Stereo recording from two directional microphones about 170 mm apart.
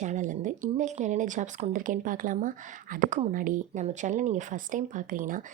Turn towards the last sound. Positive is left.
turn(degrees=-50)  # may be behind; listen again after turning